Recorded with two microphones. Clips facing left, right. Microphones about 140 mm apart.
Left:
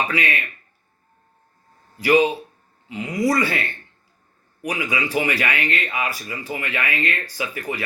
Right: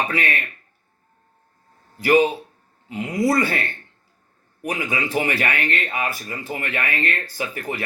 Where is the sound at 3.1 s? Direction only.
25° right (ahead or behind).